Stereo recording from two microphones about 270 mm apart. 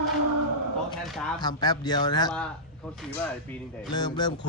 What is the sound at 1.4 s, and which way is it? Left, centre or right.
Speech, centre.